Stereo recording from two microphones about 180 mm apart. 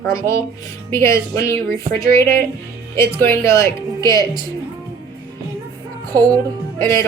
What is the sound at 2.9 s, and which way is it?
Speech, 15° left (ahead or behind).